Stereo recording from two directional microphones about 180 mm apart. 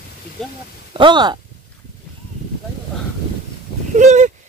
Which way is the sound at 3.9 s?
40° right (ahead or behind).